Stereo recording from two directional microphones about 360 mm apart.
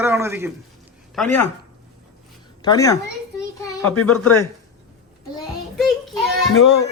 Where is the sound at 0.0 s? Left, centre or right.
Centre.